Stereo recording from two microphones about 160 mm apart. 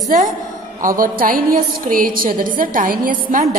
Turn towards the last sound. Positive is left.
turn(degrees=-60)  # may be behind; listen again after turning